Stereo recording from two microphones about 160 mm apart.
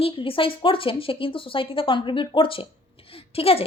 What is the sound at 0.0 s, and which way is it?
Speech, 35° left (ahead or behind).